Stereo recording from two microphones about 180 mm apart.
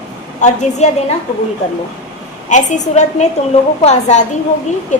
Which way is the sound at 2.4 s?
40° left (ahead or behind).